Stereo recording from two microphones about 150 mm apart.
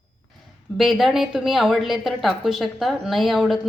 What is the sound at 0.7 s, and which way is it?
Speech, centre (ahead or behind).